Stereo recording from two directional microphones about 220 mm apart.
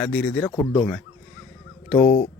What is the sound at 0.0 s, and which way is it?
Speech, 5° left (ahead or behind).